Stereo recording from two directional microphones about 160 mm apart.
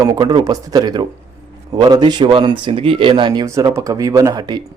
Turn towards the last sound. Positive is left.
turn(degrees=-25)  # may be behind; listen again after turning